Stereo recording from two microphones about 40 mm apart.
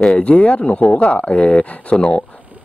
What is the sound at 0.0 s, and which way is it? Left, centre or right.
Speech, left.